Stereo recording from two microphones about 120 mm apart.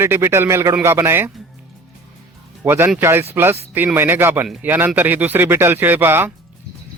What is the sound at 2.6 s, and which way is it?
Speech, 20° right (ahead or behind).